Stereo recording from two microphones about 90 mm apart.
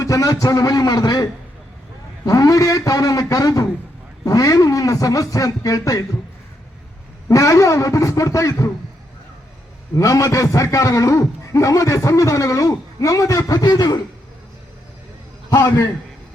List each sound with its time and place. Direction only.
0.0 s a man's voice: 40° left (ahead or behind)
7.3 s a man's voice: 40° left (ahead or behind)
9.9 s a man's voice: 40° left (ahead or behind)
15.4 s a man's voice: 40° left (ahead or behind)